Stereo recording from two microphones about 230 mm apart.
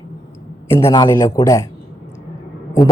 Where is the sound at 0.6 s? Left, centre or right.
Centre.